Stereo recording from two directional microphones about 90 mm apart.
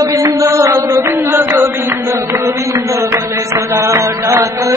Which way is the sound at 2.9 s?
35° right (ahead or behind).